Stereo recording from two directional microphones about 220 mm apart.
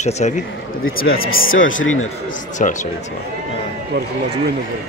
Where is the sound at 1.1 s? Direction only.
65° left (ahead or behind).